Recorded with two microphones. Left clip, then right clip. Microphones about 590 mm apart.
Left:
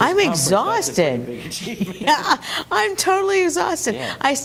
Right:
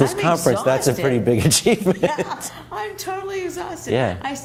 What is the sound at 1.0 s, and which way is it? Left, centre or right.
Speech, left.